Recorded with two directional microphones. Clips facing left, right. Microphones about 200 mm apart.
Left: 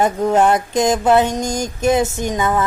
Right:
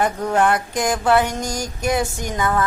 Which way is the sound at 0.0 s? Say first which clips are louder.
Left 4 dB; 20° left (ahead or behind).